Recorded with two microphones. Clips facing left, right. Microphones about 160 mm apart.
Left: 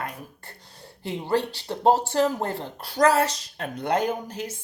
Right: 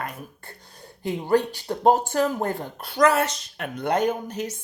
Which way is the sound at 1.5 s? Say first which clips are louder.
Right 1 dB; 45° right (ahead or behind).